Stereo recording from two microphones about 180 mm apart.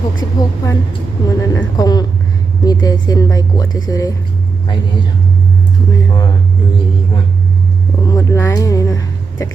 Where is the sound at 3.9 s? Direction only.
20° left (ahead or behind).